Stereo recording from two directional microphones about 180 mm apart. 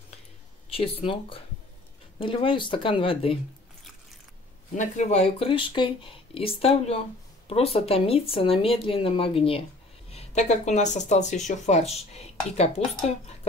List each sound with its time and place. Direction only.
0.7 s speech: 30° left (ahead or behind)
4.7 s speech: 40° left (ahead or behind)